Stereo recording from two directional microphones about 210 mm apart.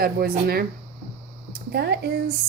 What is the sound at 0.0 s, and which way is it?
Speech, 45° right (ahead or behind).